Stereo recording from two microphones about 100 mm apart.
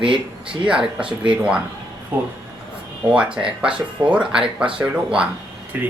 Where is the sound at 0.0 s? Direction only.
60° right (ahead or behind).